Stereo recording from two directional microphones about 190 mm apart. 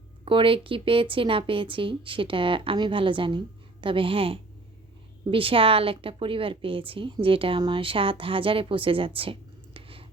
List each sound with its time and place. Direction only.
0.3 s speech: 25° right (ahead or behind)